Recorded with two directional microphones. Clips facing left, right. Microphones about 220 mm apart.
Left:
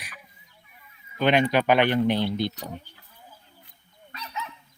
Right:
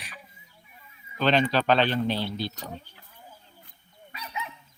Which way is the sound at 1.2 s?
15° left (ahead or behind).